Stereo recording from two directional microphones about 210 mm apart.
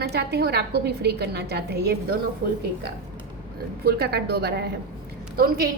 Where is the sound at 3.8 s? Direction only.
50° right (ahead or behind).